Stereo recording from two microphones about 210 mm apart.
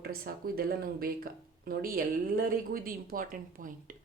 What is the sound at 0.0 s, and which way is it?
Speech, 45° right (ahead or behind).